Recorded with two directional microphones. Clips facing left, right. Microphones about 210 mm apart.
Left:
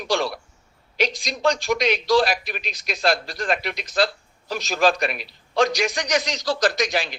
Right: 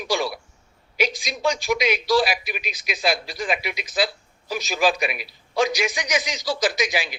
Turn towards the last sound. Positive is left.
turn(degrees=-5)  # may be behind; listen again after turning